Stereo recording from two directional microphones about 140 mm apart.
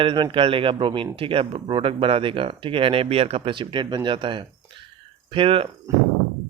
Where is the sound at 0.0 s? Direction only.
35° right (ahead or behind).